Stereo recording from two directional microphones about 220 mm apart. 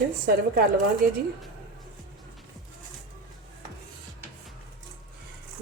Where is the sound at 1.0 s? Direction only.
40° right (ahead or behind).